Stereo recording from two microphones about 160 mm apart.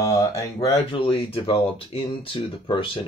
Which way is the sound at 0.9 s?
35° left (ahead or behind).